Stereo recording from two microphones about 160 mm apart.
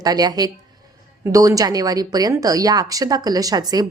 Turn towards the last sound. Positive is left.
turn(degrees=-25)  # may be behind; listen again after turning